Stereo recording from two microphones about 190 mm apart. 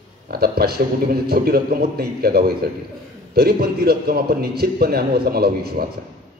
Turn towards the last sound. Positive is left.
turn(degrees=-55)  # may be behind; listen again after turning